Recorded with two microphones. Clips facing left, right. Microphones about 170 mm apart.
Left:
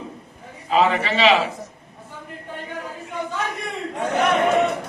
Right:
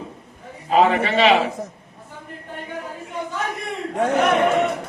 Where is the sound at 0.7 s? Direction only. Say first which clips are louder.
Right 2 dB; 50° right (ahead or behind).